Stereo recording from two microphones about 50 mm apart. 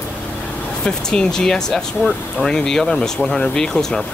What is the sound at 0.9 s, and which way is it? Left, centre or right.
Speech, centre.